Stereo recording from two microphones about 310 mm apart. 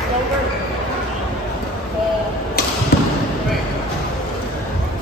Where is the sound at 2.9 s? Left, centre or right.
Left.